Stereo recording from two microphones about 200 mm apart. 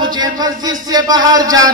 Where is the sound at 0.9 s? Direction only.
20° right (ahead or behind).